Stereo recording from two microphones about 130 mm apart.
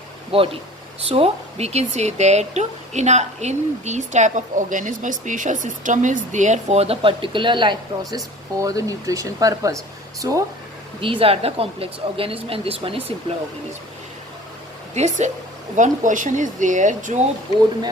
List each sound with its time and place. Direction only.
0.3 s speech: 45° right (ahead or behind)
8.5 s speech: 25° right (ahead or behind)
11.0 s speech: 45° right (ahead or behind)
14.9 s speech: 60° right (ahead or behind)
15.7 s speech: 75° right (ahead or behind)